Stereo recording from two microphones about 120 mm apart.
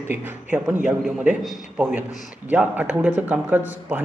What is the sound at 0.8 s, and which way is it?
A man's voice, 5° right (ahead or behind).